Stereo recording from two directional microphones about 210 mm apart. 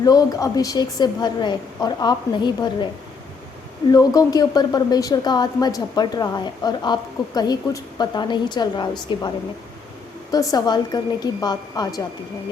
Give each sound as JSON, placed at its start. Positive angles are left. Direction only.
{"t": 0.0, "sound": "a woman's voice", "side_deg": 15}
{"t": 3.9, "sound": "a woman's voice", "side_deg": 15}
{"t": 10.3, "sound": "a woman's voice", "side_deg": 15}